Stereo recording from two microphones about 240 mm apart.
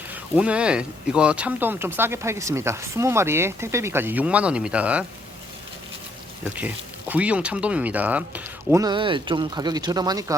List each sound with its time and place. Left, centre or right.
0.1 s speech: centre
6.4 s speech: centre